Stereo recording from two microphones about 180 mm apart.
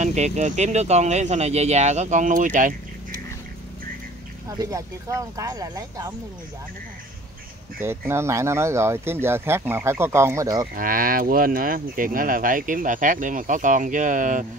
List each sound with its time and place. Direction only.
0.0 s speech: 40° right (ahead or behind)
4.5 s speech: 20° right (ahead or behind)
7.8 s speech: 15° right (ahead or behind)
10.7 s speech: 50° right (ahead or behind)